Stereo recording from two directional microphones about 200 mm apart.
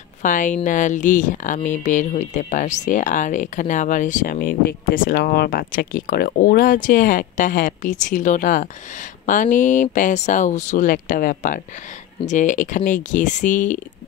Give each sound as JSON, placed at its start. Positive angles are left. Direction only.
{"t": 0.2, "sound": "speech", "side_deg": 40}